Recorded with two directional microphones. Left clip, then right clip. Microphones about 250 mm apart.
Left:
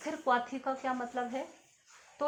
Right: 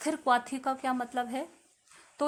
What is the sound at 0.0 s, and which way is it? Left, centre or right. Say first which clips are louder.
Speech: right 3 dB; right.